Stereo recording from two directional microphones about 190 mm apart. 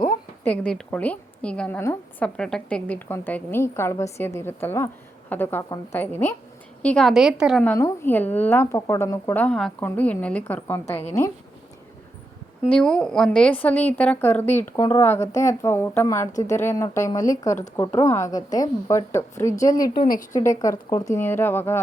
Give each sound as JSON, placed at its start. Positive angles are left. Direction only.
{"t": 0.4, "sound": "a woman's voice", "side_deg": 5}
{"t": 6.8, "sound": "a woman's voice", "side_deg": 5}
{"t": 7.6, "sound": "a woman's voice", "side_deg": 10}
{"t": 12.7, "sound": "a woman's voice", "side_deg": 5}